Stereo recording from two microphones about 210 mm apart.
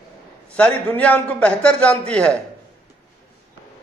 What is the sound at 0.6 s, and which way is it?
A man's voice, 5° left (ahead or behind).